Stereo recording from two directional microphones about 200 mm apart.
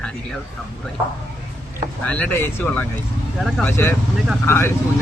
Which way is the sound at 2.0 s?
5° left (ahead or behind).